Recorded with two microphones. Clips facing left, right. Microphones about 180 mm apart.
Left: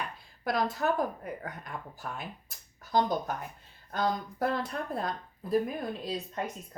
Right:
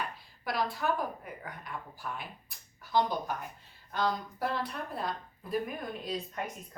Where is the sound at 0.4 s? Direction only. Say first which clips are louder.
Left 3 dB; 45° left (ahead or behind).